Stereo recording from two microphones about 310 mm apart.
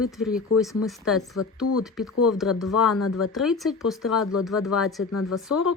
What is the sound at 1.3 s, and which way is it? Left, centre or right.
Speech, left.